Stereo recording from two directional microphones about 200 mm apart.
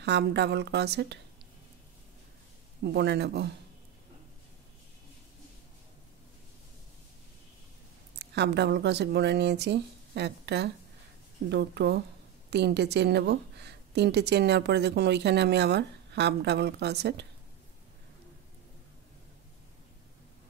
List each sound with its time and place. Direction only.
0.0 s a woman's voice: 60° right (ahead or behind)
2.8 s a woman's voice: 55° right (ahead or behind)
8.2 s a woman's voice: 60° right (ahead or behind)